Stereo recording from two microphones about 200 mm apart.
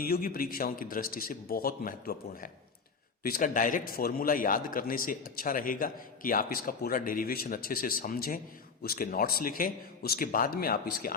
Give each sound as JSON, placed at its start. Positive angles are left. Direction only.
{"t": 0.0, "sound": "a man's voice", "side_deg": 45}